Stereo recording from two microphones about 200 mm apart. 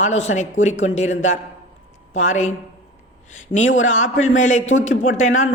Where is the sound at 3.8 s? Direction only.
35° left (ahead or behind).